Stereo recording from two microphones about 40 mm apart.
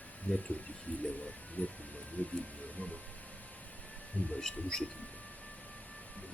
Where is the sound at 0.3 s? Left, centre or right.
Left.